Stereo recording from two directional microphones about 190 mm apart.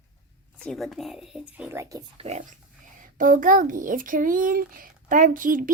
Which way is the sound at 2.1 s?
35° right (ahead or behind).